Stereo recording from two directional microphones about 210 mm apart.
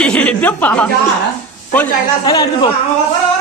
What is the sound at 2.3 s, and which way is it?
Speech, 20° left (ahead or behind).